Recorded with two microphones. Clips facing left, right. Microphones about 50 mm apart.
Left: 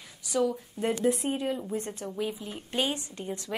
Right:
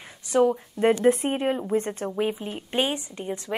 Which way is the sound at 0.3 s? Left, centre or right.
Right.